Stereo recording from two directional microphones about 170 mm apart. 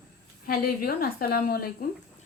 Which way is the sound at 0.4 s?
60° left (ahead or behind).